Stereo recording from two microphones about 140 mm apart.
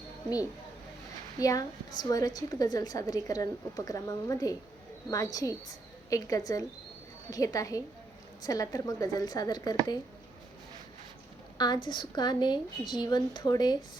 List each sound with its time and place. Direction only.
1.4 s a woman's voice: 25° left (ahead or behind)
11.5 s a woman's voice: 30° left (ahead or behind)